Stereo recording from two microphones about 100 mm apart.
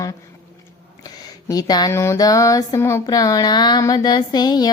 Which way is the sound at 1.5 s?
40° left (ahead or behind).